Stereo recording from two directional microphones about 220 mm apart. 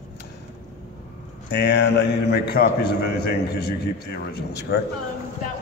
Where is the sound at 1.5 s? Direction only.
50° left (ahead or behind).